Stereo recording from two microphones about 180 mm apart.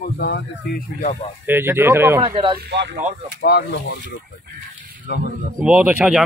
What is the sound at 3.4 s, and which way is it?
Speech, 65° left (ahead or behind).